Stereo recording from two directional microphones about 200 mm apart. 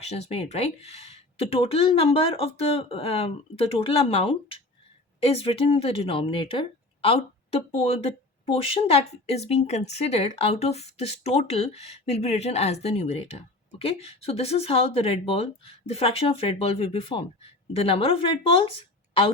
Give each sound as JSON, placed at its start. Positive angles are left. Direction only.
{"t": 0.0, "sound": "speech", "side_deg": 30}